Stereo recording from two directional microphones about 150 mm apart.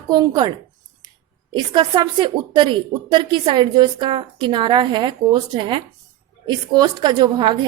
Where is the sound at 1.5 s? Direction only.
30° right (ahead or behind).